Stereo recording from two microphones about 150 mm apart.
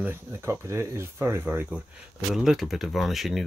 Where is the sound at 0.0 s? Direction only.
20° right (ahead or behind).